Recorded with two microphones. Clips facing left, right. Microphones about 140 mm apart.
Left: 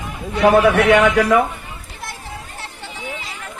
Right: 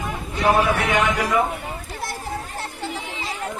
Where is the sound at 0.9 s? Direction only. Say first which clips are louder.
Left 8 dB; 65° left (ahead or behind).